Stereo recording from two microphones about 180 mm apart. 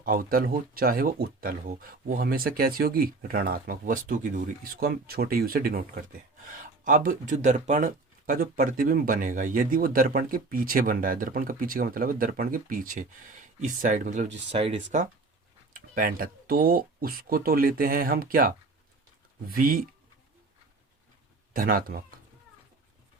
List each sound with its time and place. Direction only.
0.0 s speech: 50° right (ahead or behind); by 14.8 s 35° right (ahead or behind)
15.7 s speech: 50° right (ahead or behind)
21.5 s speech: 50° right (ahead or behind)